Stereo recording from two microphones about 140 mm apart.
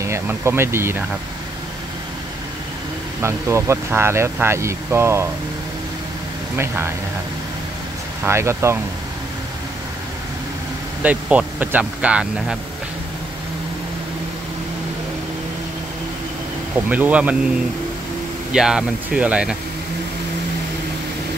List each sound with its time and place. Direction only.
0.0 s speech: 20° right (ahead or behind)
3.2 s speech: 20° right (ahead or behind)
6.5 s speech: 15° right (ahead or behind)
8.2 s speech: 20° right (ahead or behind)
11.0 s speech: 10° right (ahead or behind)
16.9 s speech: 10° right (ahead or behind)
18.5 s speech: 5° right (ahead or behind)